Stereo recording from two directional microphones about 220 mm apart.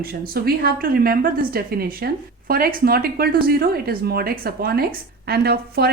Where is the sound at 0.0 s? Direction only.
45° right (ahead or behind).